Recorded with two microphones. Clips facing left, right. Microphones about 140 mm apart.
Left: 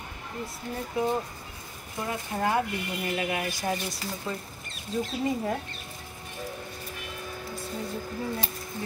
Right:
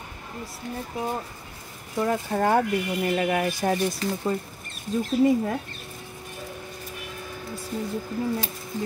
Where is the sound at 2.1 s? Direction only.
50° right (ahead or behind).